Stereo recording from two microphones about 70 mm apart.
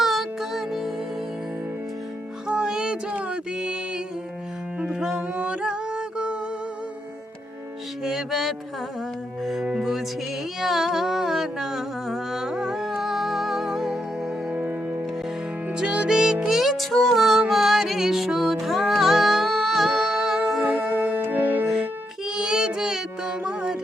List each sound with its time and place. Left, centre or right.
0.0 s music: centre
2.5 s music: centre
8.0 s music: centre
14.5 s music: centre
21.2 s music: right
22.3 s child singing: centre